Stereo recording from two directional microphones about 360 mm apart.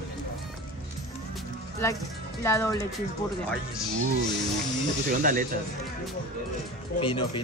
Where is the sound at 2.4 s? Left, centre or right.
Centre.